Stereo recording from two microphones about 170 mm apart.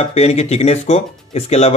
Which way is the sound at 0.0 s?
40° left (ahead or behind).